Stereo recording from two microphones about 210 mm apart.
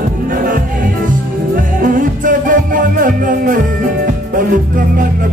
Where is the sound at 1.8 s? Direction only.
40° right (ahead or behind).